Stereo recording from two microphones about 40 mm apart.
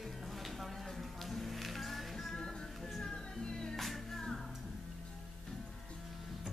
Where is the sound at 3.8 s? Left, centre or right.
Centre.